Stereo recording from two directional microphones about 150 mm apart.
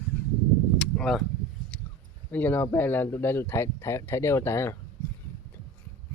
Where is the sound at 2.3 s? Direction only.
10° left (ahead or behind).